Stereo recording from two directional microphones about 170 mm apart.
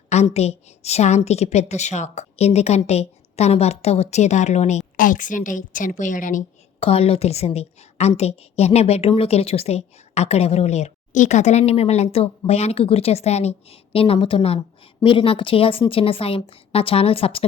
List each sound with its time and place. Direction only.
0.1 s a woman's voice: 40° left (ahead or behind)
6.7 s a woman's voice: 35° left (ahead or behind)